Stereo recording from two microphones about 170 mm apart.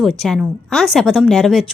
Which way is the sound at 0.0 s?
Centre (ahead or behind).